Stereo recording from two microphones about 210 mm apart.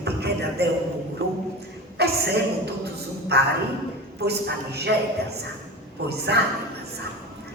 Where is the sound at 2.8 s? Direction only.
50° right (ahead or behind).